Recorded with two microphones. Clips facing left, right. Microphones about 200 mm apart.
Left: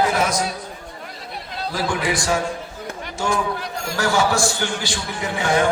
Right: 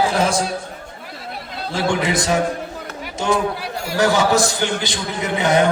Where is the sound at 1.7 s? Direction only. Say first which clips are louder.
Right 4 dB; 25° right (ahead or behind).